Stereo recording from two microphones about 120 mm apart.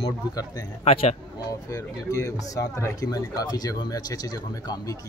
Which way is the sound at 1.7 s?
25° left (ahead or behind).